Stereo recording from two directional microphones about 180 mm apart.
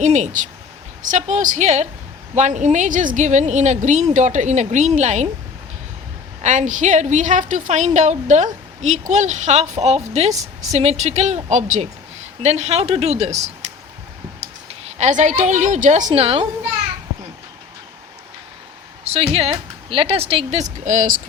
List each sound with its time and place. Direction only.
0.0 s a woman's voice: 40° right (ahead or behind)
6.4 s speech: 40° right (ahead or behind)
14.7 s a woman's voice: 40° right (ahead or behind)
16.1 s speech: 35° right (ahead or behind)
19.0 s speech: 35° right (ahead or behind)